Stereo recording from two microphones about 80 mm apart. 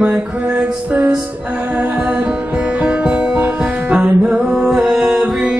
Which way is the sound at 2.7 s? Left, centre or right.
Centre.